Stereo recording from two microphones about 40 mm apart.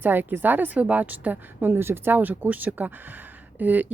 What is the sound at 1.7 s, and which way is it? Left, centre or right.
Speech, right.